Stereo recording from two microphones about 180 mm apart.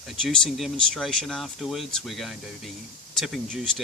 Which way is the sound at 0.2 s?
Centre (ahead or behind).